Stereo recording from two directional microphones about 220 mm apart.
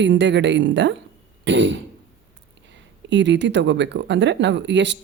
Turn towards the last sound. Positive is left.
turn(degrees=-55)  # may be behind; listen again after turning